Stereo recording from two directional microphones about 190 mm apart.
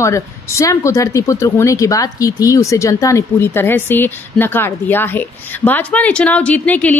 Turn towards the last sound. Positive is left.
turn(degrees=10)  # may be behind; listen again after turning